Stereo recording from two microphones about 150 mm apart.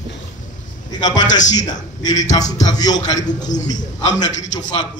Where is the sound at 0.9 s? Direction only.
25° left (ahead or behind).